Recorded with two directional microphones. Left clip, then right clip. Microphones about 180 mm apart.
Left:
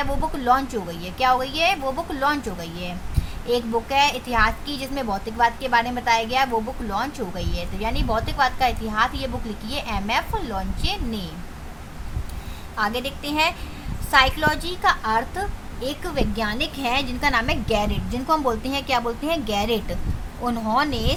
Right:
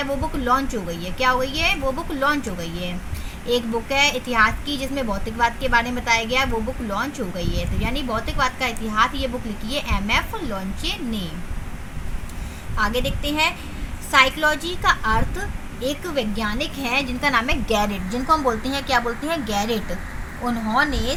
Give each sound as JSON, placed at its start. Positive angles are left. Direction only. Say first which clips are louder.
{"t": 0.4, "sound": "a woman's voice", "louder": "left 1 dB", "side_deg": 10}
{"t": 12.7, "sound": "a woman's voice", "louder": "right 2 dB", "side_deg": 10}